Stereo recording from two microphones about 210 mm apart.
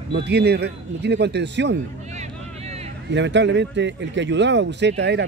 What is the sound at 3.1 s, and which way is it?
Speech, 60° right (ahead or behind).